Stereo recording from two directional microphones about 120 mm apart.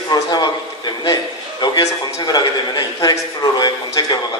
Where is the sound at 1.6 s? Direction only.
30° left (ahead or behind).